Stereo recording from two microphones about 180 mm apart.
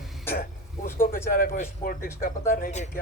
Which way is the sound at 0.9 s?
50° left (ahead or behind).